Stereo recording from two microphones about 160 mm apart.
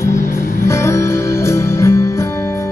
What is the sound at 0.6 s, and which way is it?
Music, 15° left (ahead or behind).